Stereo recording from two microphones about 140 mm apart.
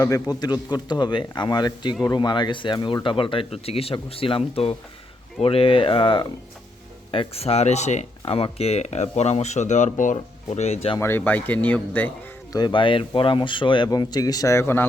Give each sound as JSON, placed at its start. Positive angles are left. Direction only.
{"t": 0.0, "sound": "speech", "side_deg": 25}
{"t": 8.2, "sound": "speech", "side_deg": 45}
{"t": 10.9, "sound": "speech", "side_deg": 15}
{"t": 12.5, "sound": "speech", "side_deg": 35}